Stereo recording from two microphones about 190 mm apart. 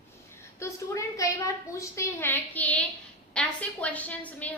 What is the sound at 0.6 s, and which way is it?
A woman's voice, 15° left (ahead or behind).